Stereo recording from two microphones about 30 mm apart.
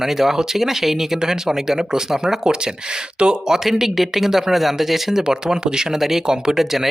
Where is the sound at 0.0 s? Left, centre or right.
Centre.